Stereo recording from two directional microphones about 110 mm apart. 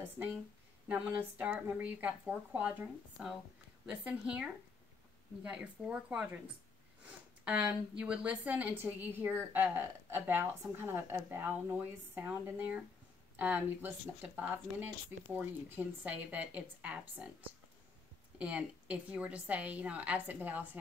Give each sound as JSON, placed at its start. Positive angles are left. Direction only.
{"t": 0.2, "sound": "speech", "side_deg": -20}
{"t": 18.4, "sound": "speech", "side_deg": -10}